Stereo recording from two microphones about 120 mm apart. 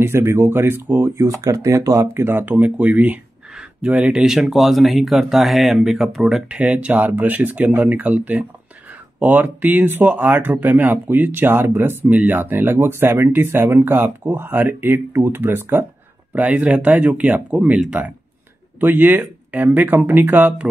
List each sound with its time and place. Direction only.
0.0 s speech: 20° right (ahead or behind)
1.1 s speech: 30° right (ahead or behind); by 6.6 s centre (ahead or behind)
6.6 s speech: 10° right (ahead or behind)